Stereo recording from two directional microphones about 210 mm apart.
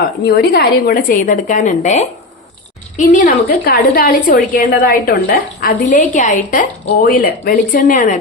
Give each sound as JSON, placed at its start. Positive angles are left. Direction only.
{"t": 0.3, "sound": "a woman's voice", "side_deg": 50}
{"t": 6.8, "sound": "speech", "side_deg": 50}